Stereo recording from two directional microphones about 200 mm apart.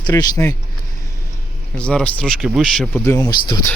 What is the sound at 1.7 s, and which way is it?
Speech, 5° left (ahead or behind).